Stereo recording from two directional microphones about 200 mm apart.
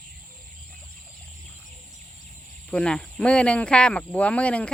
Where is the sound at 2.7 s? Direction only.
5° left (ahead or behind).